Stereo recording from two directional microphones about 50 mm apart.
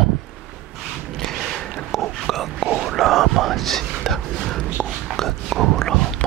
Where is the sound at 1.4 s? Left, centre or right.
Centre.